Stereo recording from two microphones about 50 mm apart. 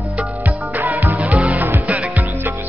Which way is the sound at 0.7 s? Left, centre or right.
Right.